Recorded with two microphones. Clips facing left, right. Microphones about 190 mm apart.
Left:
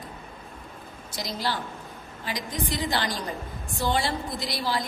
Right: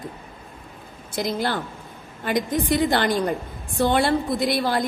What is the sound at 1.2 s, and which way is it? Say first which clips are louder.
A woman's voice: right 6 dB; 55° right (ahead or behind).